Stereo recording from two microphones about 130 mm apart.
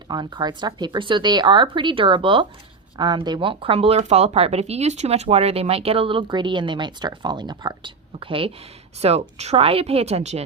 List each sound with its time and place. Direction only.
0.1 s speech: 35° right (ahead or behind)
9.0 s speech: 55° right (ahead or behind)